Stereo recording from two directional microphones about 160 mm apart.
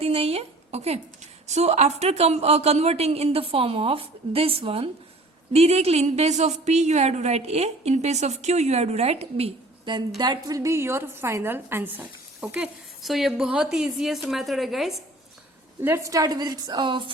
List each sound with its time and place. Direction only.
0.0 s a woman's voice: 40° right (ahead or behind); by 14.9 s centre (ahead or behind)
15.8 s a woman's voice: 15° right (ahead or behind)